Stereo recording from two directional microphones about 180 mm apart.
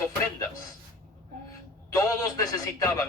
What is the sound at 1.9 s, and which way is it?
Speech, 20° left (ahead or behind).